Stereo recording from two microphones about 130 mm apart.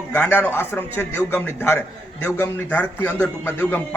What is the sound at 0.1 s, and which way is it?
A man's voice, 15° left (ahead or behind).